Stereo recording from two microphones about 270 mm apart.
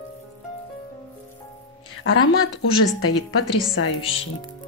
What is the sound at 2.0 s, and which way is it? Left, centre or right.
Speech, left.